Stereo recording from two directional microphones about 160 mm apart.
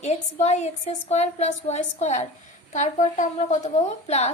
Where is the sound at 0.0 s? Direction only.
45° left (ahead or behind).